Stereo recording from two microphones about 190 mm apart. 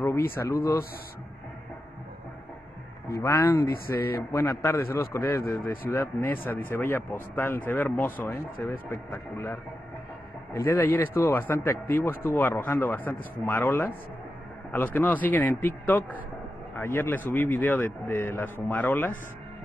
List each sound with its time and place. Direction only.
0.4 s speech: 15° left (ahead or behind)
3.1 s speech: 15° left (ahead or behind)